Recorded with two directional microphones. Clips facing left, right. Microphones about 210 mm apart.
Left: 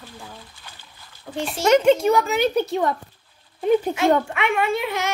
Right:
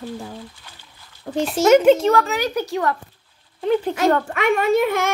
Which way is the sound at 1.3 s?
45° right (ahead or behind).